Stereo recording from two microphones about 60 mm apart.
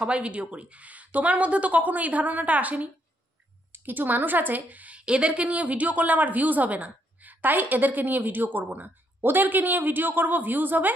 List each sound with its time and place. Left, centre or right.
0.0 s speech: right